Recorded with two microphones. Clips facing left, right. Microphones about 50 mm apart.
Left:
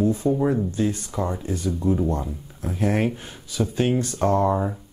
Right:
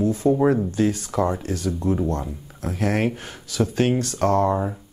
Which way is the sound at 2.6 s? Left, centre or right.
Right.